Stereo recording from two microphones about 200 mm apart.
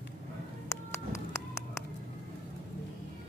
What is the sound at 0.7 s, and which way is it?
Music, 15° left (ahead or behind).